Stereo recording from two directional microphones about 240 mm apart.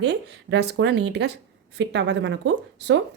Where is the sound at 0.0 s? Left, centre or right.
Right.